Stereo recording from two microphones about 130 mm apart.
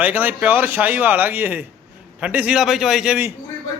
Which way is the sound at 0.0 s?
15° right (ahead or behind).